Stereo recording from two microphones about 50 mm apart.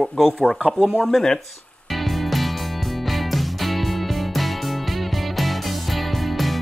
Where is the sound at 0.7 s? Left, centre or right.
Right.